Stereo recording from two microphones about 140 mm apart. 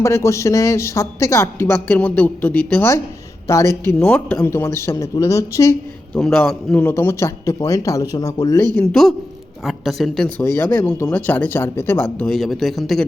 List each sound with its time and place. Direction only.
0.0 s speech: 20° left (ahead or behind)
3.9 s speech: 10° left (ahead or behind)
6.1 s speech: 5° left (ahead or behind)
6.8 s speech: 15° left (ahead or behind)
8.8 s speech: 5° left (ahead or behind)
10.3 s speech: 15° left (ahead or behind)
12.2 s speech: centre (ahead or behind)